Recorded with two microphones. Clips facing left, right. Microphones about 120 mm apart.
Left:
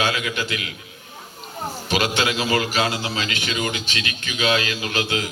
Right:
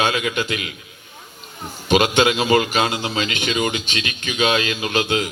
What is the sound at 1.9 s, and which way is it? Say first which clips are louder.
A man's voice: right 6 dB; 20° right (ahead or behind).